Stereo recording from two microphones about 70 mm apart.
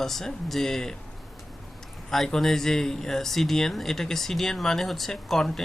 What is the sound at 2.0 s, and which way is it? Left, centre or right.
Speech, centre.